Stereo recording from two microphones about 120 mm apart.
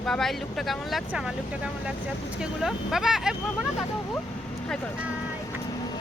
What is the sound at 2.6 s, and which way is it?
Speech, 5° right (ahead or behind).